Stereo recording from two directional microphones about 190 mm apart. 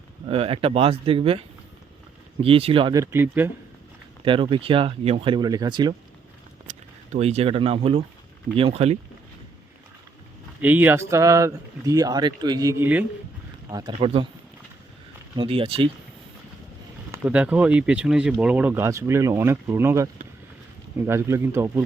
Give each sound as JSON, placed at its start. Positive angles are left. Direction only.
{"t": 0.3, "sound": "speech", "side_deg": -30}
{"t": 4.2, "sound": "speech", "side_deg": -25}
{"t": 6.7, "sound": "speech", "side_deg": -35}
{"t": 10.6, "sound": "speech", "side_deg": -10}
{"t": 13.7, "sound": "speech", "side_deg": -20}
{"t": 15.4, "sound": "speech", "side_deg": -30}
{"t": 17.1, "sound": "speech", "side_deg": -5}